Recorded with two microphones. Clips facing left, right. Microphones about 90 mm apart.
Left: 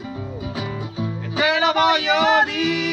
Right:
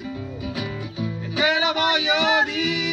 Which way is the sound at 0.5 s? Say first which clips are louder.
Left 3 dB; 35° left (ahead or behind).